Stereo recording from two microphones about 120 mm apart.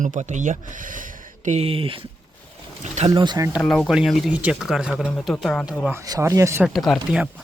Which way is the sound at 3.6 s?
Centre (ahead or behind).